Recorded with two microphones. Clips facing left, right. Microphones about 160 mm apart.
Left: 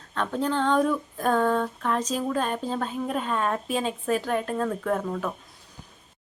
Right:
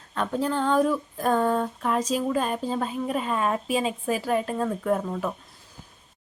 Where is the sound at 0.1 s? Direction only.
5° right (ahead or behind).